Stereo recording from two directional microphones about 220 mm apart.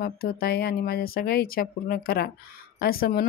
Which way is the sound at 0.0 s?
40° left (ahead or behind).